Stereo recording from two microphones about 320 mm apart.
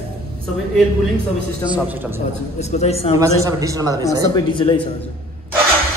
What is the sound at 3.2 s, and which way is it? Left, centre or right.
Speech, centre.